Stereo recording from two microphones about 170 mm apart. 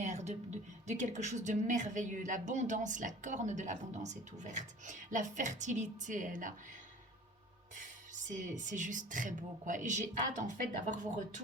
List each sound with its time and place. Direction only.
0.0 s a sound: 40° right (ahead or behind)
0.9 s speech: 45° right (ahead or behind)
8.1 s speech: 45° right (ahead or behind)